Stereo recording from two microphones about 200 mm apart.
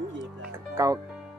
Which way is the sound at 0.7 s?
15° right (ahead or behind).